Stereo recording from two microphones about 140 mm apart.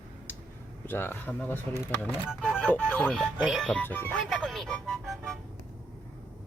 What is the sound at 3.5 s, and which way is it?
Speech, 5° left (ahead or behind).